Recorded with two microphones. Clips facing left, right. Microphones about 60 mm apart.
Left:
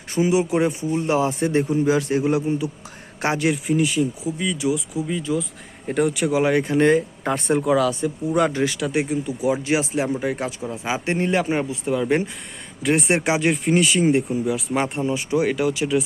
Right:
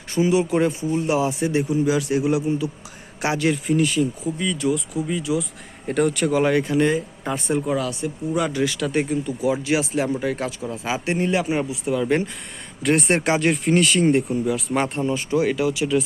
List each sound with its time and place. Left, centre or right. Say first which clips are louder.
0.1 s speech: even; left
0.9 s a man's voice: even; left
3.7 s speech: even; centre
6.5 s speech: even; left
6.7 s speech: left 3 dB; left
8.3 s speech: left 3 dB; left
8.5 s speech: even; left
8.8 s speech: even; centre; by 12.0 s left
12.0 s speech: even; centre
12.8 s speech: even; centre
15.3 s speech: even; left